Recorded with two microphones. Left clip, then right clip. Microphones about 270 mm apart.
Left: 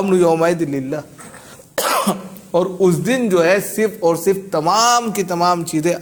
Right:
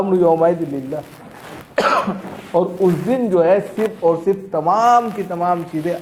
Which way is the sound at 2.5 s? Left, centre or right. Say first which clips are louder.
Left 1 dB; left.